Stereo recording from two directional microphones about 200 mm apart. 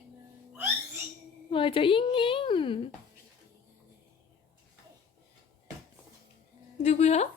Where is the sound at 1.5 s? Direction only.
25° left (ahead or behind).